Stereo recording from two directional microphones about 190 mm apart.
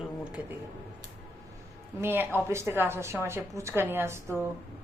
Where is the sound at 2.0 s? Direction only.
10° right (ahead or behind).